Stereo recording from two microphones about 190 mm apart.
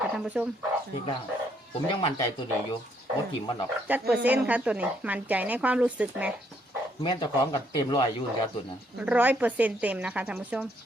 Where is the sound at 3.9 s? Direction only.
10° right (ahead or behind).